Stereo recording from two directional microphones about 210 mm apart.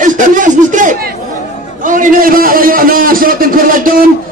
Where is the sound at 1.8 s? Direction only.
40° right (ahead or behind).